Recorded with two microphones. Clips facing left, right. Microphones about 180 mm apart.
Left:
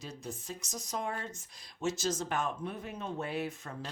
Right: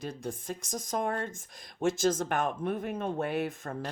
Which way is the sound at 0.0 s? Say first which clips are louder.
Right 6 dB; 55° right (ahead or behind).